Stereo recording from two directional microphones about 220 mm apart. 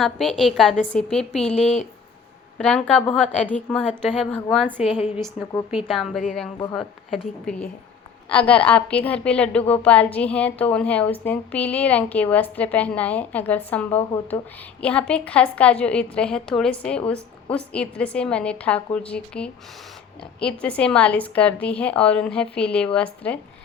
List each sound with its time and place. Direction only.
0.0 s a woman's voice: centre (ahead or behind)
1.5 s speech: 30° left (ahead or behind)
2.6 s a woman's voice: 5° left (ahead or behind)
8.3 s a woman's voice: 5° left (ahead or behind)